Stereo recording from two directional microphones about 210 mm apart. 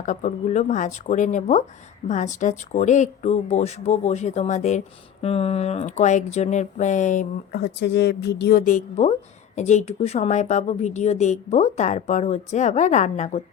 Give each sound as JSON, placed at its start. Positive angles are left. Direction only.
{"t": 0.0, "sound": "speech", "side_deg": 35}
{"t": 7.5, "sound": "a woman's voice", "side_deg": 55}